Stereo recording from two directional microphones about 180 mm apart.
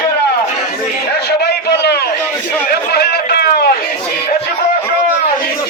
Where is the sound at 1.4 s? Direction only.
70° left (ahead or behind).